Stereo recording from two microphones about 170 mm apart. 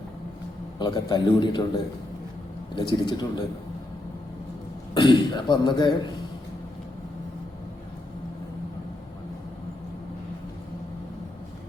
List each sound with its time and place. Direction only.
0.8 s speech: 25° left (ahead or behind)
2.7 s speech: 25° left (ahead or behind)
4.9 s speech: 25° left (ahead or behind)